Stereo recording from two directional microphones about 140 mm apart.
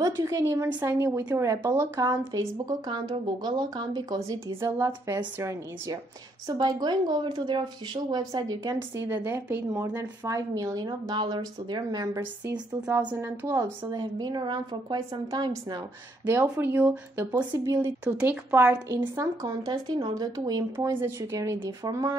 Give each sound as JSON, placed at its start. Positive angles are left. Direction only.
{"t": 0.0, "sound": "a woman's voice", "side_deg": -25}
{"t": 9.1, "sound": "a woman's voice", "side_deg": -10}
{"t": 13.1, "sound": "a woman's voice", "side_deg": -15}
{"t": 16.3, "sound": "speech", "side_deg": -15}
{"t": 17.4, "sound": "a woman's voice", "side_deg": -30}
{"t": 17.7, "sound": "speech", "side_deg": -15}
{"t": 18.9, "sound": "a woman's voice", "side_deg": -30}